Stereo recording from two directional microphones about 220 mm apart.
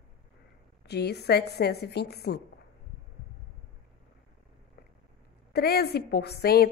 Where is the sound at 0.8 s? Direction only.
50° left (ahead or behind).